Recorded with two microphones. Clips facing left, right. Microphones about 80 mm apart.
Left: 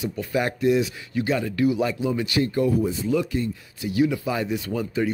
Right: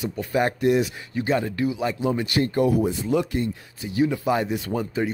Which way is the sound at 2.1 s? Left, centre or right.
Right.